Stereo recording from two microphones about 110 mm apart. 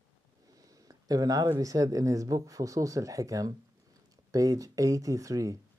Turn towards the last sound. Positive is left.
turn(degrees=-30)  # may be behind; listen again after turning